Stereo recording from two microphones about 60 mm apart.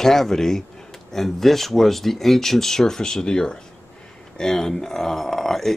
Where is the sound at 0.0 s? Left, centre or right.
Centre.